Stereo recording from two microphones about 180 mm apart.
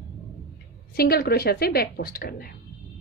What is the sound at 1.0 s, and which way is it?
A woman's voice, 60° left (ahead or behind).